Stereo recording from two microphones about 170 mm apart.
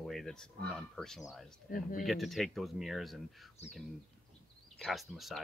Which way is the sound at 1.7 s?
55° left (ahead or behind).